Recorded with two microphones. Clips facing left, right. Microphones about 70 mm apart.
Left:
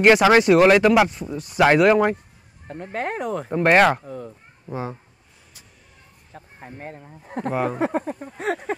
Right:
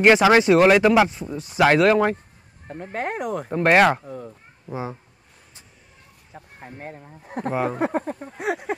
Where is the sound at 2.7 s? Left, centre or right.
Centre.